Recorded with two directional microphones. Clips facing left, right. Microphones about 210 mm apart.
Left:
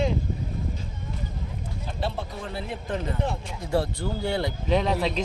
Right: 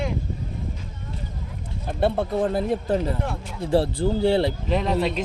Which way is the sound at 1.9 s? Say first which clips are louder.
Right 10 dB; 55° right (ahead or behind).